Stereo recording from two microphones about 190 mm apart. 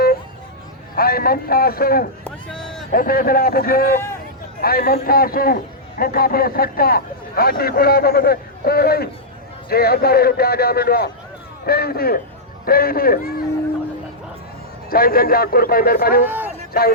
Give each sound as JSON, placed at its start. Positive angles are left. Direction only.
{"t": 0.9, "sound": "a man's voice", "side_deg": 50}
{"t": 2.2, "sound": "a sound", "side_deg": 5}
{"t": 2.9, "sound": "a man's voice", "side_deg": 50}
{"t": 14.8, "sound": "a man's voice", "side_deg": 50}
{"t": 16.2, "sound": "speech", "side_deg": -10}